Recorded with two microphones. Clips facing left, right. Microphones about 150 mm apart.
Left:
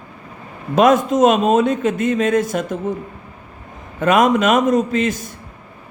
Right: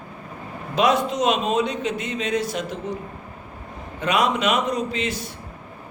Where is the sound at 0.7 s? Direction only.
50° left (ahead or behind).